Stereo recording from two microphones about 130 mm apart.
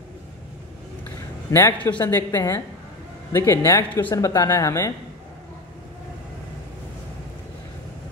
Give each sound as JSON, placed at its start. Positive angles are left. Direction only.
{"t": 1.5, "sound": "speech", "side_deg": 20}